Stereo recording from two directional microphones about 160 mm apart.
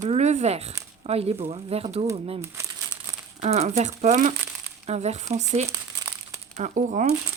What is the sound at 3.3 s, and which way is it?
Speech, 45° right (ahead or behind).